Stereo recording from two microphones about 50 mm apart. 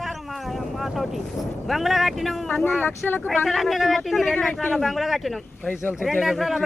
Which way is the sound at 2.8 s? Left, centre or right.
Left.